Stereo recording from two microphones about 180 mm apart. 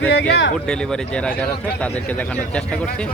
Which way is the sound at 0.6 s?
5° left (ahead or behind).